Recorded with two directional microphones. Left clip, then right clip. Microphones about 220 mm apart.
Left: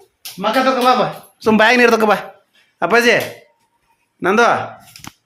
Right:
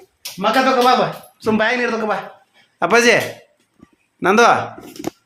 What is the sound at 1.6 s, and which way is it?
Speech, 50° left (ahead or behind).